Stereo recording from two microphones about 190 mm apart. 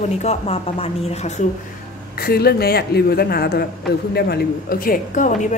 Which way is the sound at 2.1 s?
55° left (ahead or behind).